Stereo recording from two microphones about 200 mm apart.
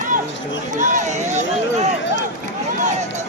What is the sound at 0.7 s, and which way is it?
Speech, 35° right (ahead or behind).